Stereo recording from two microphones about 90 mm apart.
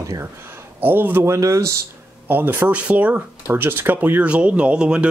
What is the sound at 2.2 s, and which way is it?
Speech, 25° right (ahead or behind).